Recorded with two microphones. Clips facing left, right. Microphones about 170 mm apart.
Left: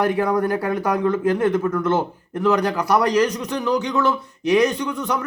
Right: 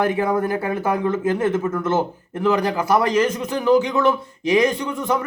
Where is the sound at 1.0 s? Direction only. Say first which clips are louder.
Left 3 dB; 5° right (ahead or behind).